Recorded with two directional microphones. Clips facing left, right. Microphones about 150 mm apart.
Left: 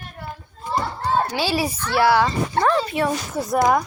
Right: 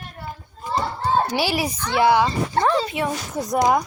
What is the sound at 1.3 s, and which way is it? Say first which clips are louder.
Speech: even; 15° right (ahead or behind).